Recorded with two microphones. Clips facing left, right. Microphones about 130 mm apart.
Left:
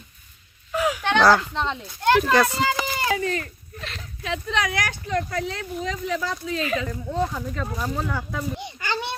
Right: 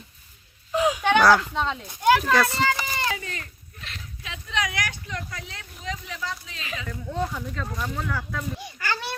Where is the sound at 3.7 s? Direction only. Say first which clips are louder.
Left 6 dB; 90° left.